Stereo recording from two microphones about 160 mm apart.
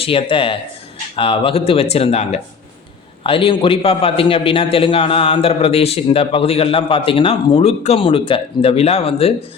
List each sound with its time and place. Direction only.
0.0 s a man's voice: 35° left (ahead or behind)